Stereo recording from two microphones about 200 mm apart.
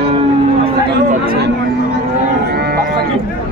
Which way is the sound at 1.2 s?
45° right (ahead or behind).